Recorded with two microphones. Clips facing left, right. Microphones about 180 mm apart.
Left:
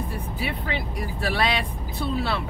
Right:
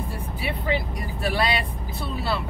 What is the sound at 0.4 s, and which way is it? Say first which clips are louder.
Speech: right 4 dB; centre (ahead or behind).